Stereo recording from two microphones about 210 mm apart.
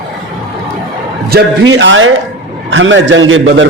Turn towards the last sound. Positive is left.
turn(degrees=-65)  # may be behind; listen again after turning